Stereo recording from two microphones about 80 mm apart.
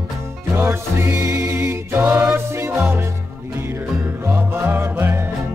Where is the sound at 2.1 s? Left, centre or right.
Centre.